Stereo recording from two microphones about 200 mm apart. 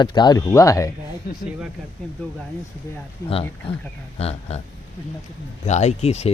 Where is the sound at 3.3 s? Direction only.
25° left (ahead or behind).